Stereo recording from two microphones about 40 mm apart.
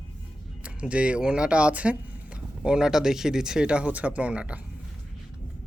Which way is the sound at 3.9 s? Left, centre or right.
Right.